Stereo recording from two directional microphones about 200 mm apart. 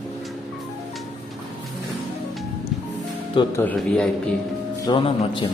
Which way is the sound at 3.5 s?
5° left (ahead or behind).